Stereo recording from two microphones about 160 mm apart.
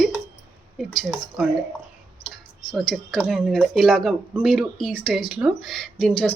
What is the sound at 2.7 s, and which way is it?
Speech, 5° left (ahead or behind).